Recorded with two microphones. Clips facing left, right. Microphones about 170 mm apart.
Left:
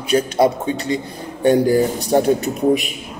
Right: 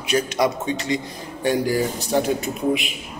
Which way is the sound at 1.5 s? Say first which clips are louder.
Left 6 dB; 60° left (ahead or behind).